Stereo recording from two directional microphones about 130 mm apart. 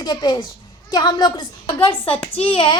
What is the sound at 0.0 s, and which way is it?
A woman's voice, 35° left (ahead or behind).